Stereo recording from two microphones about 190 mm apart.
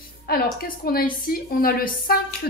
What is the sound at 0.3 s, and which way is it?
A woman's voice, 50° left (ahead or behind).